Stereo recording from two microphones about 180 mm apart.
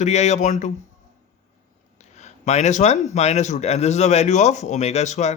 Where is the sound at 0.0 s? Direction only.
40° left (ahead or behind).